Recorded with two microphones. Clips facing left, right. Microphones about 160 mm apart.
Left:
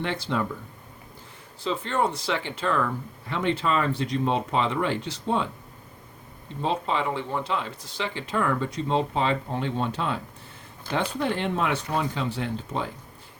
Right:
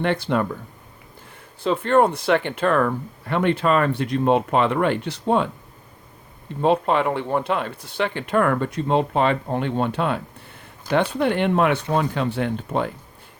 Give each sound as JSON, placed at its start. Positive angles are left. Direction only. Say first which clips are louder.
{"t": 0.0, "sound": "speech", "louder": "right 6 dB", "side_deg": -60}
{"t": 1.6, "sound": "speech", "louder": "right 8 dB", "side_deg": -55}
{"t": 6.6, "sound": "speech", "louder": "right 8 dB", "side_deg": -60}